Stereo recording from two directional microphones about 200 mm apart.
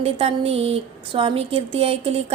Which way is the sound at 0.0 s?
30° right (ahead or behind).